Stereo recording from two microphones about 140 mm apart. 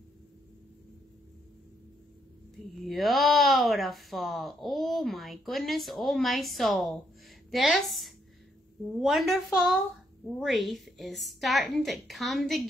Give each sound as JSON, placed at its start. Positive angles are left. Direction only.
{"t": 2.7, "sound": "speech", "side_deg": 0}